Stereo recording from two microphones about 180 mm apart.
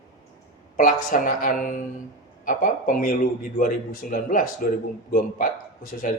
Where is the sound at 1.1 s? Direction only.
50° left (ahead or behind).